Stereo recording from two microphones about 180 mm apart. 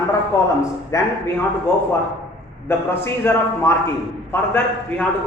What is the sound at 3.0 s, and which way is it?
A man's voice, 15° left (ahead or behind).